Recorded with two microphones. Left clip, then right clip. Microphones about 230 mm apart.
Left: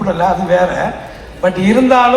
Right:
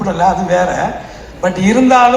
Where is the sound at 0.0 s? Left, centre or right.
Right.